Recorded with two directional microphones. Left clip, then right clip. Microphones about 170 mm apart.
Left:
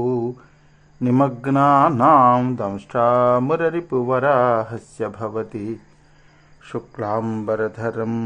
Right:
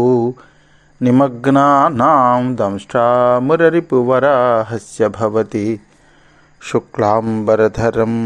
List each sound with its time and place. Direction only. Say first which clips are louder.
0.0 s a sound: right 9 dB; 30° right (ahead or behind)
1.0 s speech: right 6 dB; 25° right (ahead or behind)
2.2 s speech: right 2 dB; 5° right (ahead or behind)
2.5 s speech: right 7 dB; 25° right (ahead or behind)